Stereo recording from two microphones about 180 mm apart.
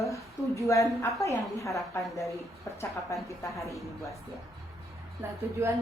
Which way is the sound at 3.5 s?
15° left (ahead or behind).